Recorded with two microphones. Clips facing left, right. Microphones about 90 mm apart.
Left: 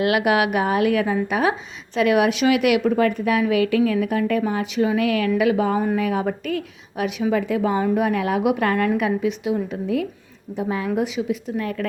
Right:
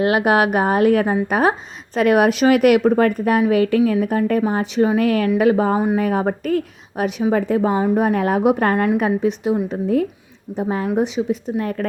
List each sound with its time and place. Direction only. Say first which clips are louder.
0.0 s speech: right 3 dB; 35° right (ahead or behind)